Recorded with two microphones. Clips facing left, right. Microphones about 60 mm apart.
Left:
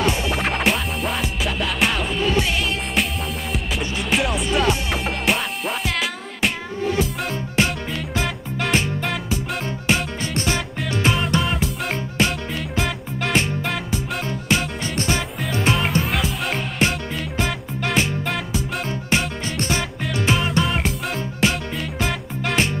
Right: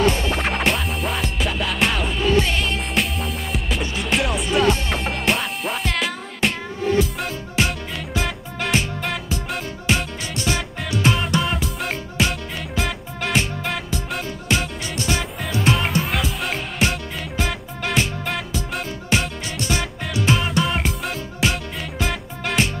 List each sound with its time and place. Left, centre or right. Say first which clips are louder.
0.0 s music: right 1 dB; centre
10.3 s music: even; left
11.1 s music: even; centre
14.8 s music: left 1 dB; left
15.6 s music: even; centre
20.2 s music: even; centre